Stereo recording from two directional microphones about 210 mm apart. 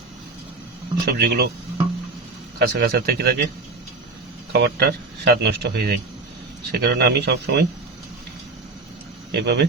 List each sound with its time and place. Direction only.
1.0 s speech: 50° right (ahead or behind)
2.6 s speech: 50° right (ahead or behind)
4.5 s speech: 50° right (ahead or behind)
9.3 s speech: 50° right (ahead or behind)